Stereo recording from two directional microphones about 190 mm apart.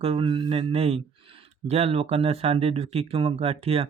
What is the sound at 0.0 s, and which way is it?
Speech, 30° right (ahead or behind).